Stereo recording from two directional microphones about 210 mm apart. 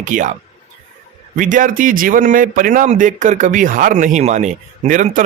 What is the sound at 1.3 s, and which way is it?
Speech, 40° right (ahead or behind).